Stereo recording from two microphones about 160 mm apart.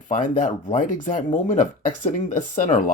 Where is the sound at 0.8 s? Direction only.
55° left (ahead or behind).